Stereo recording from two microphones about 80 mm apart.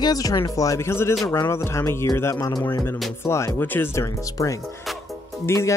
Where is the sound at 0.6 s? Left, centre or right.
Left.